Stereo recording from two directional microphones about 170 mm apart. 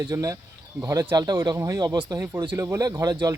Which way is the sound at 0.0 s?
20° right (ahead or behind).